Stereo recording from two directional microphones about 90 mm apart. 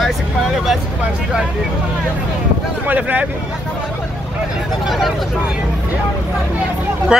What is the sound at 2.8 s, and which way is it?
Speech, 20° right (ahead or behind).